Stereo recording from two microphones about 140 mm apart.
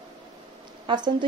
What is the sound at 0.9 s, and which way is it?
Speech, 35° right (ahead or behind).